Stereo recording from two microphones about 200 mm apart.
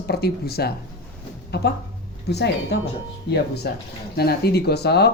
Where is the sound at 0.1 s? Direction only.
50° left (ahead or behind).